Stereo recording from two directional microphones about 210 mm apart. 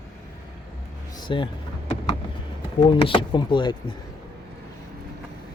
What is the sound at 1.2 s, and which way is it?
Speech, 25° left (ahead or behind).